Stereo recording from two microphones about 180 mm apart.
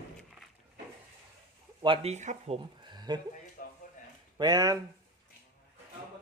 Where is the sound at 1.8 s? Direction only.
30° right (ahead or behind).